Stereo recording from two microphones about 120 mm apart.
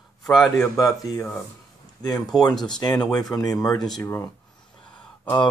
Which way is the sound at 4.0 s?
20° left (ahead or behind).